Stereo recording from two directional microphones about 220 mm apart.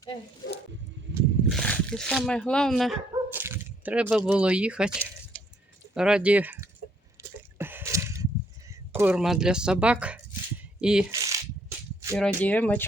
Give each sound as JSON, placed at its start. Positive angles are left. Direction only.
{"t": 0.0, "sound": "speech", "side_deg": 20}
{"t": 1.1, "sound": "wild animals", "side_deg": -55}
{"t": 1.5, "sound": "dog", "side_deg": 5}
{"t": 4.3, "sound": "speech", "side_deg": -5}
{"t": 5.3, "sound": "a sound", "side_deg": 5}
{"t": 5.9, "sound": "speech", "side_deg": -5}
{"t": 7.2, "sound": "a sound", "side_deg": -10}
{"t": 8.7, "sound": "speech", "side_deg": -10}
{"t": 11.1, "sound": "a sound", "side_deg": -15}
{"t": 12.4, "sound": "speech", "side_deg": 5}